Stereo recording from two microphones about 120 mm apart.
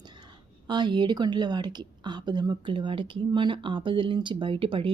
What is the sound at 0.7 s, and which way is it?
A woman's voice, 40° right (ahead or behind).